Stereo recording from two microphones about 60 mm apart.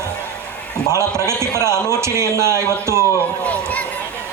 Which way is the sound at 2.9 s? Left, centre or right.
Left.